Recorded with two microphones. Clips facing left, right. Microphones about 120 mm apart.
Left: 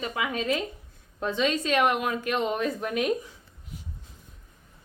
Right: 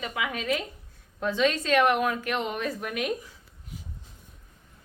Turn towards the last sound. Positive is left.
turn(degrees=25)  # may be behind; listen again after turning